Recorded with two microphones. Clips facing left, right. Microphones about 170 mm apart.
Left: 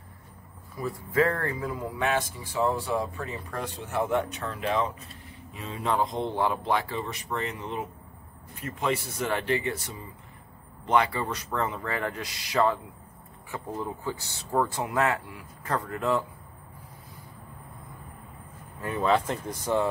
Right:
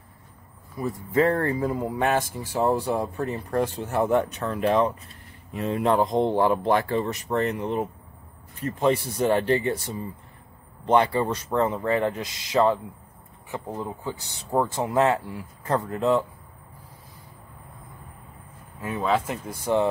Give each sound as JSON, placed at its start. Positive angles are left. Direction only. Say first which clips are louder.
{"t": 0.7, "sound": "speech", "louder": "right 3 dB", "side_deg": -25}
{"t": 8.6, "sound": "speech", "louder": "right 6 dB", "side_deg": -30}
{"t": 18.8, "sound": "speech", "louder": "even", "side_deg": -5}